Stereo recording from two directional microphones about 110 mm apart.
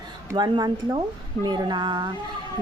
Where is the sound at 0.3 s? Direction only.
40° right (ahead or behind).